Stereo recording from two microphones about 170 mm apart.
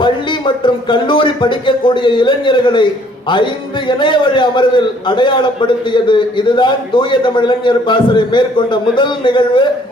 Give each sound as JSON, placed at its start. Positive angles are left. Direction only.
{"t": 0.0, "sound": "speech", "side_deg": 30}